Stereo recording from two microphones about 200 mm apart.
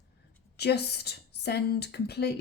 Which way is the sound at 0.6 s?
55° left (ahead or behind).